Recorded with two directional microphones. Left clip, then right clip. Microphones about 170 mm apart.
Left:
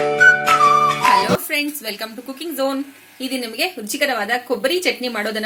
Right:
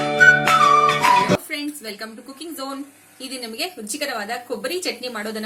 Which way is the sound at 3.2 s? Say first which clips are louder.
Left 6 dB; 35° left (ahead or behind).